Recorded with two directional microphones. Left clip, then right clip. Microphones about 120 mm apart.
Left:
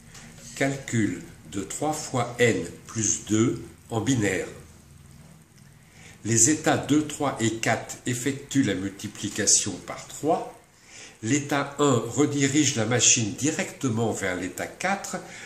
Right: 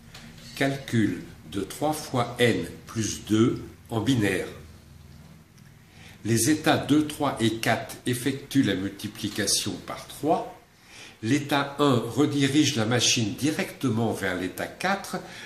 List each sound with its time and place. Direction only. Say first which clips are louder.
0.6 s a man's voice: even; centre (ahead or behind)
6.2 s a man's voice: left 1 dB; 10° left (ahead or behind)
10.2 s a man's voice: even; 5° right (ahead or behind)